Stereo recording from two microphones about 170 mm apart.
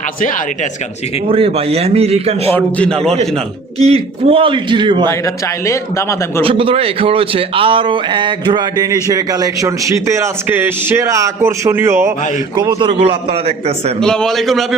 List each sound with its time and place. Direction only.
0.2 s speech: 50° left (ahead or behind)
1.3 s a man's voice: 35° right (ahead or behind)
2.6 s speech: 10° left (ahead or behind)
3.8 s a man's voice: 35° right (ahead or behind)
5.2 s speech: 20° left (ahead or behind)
6.4 s a man's voice: 30° right (ahead or behind); by 12.1 s 15° right (ahead or behind)
12.5 s a man's voice: 30° right (ahead or behind)
14.0 s a man's voice: 5° left (ahead or behind)